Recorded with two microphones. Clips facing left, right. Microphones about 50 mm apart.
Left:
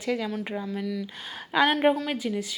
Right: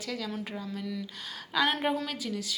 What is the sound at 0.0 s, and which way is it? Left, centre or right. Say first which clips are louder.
A woman's voice: left 7 dB; left.